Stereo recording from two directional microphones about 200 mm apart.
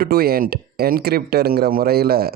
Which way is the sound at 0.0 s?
50° right (ahead or behind).